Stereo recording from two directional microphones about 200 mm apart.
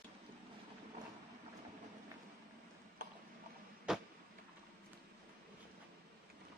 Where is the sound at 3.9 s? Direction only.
5° right (ahead or behind).